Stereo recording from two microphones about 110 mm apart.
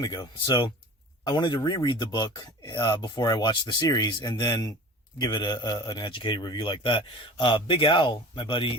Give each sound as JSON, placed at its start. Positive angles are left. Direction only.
{"t": 0.0, "sound": "a man's voice", "side_deg": 40}